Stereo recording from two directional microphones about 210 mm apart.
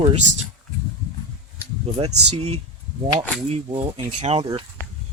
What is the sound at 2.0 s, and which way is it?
Speech, 30° right (ahead or behind).